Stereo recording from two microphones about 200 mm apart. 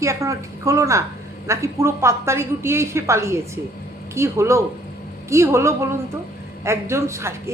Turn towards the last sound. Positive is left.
turn(degrees=-15)  # may be behind; listen again after turning